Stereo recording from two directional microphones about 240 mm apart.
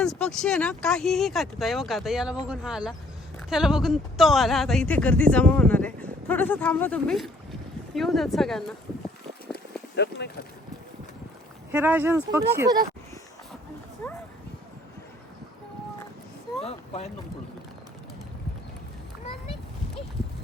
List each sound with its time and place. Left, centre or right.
0.0 s speech: centre
9.5 s a sound: left
11.7 s speech: centre
16.6 s boat: left